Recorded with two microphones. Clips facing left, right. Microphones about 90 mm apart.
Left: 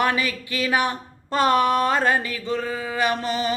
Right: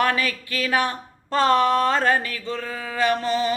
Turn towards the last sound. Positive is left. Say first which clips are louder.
# right 2 dB
turn(degrees=20)  # may be behind; listen again after turning